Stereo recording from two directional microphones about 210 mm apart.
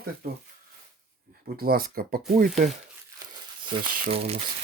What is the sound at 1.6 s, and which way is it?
Speech, 45° right (ahead or behind).